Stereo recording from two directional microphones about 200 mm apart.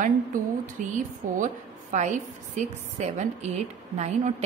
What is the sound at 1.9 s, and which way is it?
A woman's voice, 35° right (ahead or behind).